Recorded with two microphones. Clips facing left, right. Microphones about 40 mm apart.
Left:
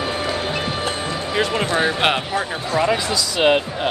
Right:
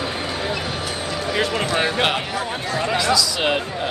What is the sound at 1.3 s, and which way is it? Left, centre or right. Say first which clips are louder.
Speech: left 2 dB; centre.